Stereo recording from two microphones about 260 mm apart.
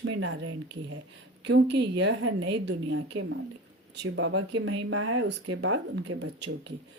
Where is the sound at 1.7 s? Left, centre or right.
Right.